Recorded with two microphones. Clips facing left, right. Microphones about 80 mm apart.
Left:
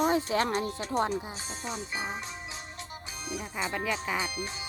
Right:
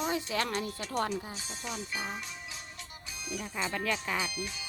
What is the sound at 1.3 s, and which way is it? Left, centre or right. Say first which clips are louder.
Music: left 3 dB; left.